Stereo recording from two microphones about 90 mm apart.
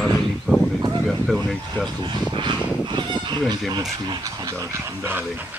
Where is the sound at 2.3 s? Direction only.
60° right (ahead or behind).